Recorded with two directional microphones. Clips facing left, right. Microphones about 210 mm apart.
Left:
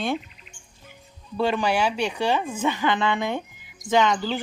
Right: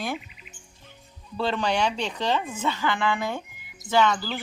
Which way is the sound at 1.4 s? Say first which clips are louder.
Left 3 dB; 10° left (ahead or behind).